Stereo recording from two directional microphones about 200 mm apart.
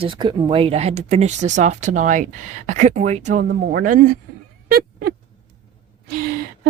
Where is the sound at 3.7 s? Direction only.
50° right (ahead or behind).